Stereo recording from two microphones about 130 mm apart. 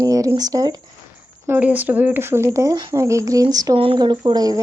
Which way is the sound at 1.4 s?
15° right (ahead or behind).